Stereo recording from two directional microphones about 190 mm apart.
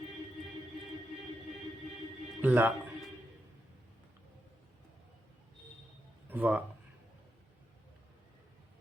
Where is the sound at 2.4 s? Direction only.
10° right (ahead or behind).